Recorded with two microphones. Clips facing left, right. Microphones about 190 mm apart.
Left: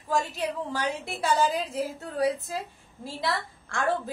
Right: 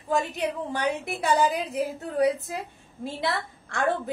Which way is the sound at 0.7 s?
15° right (ahead or behind).